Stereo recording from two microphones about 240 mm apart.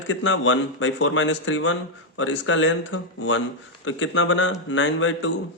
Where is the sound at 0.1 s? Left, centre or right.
Left.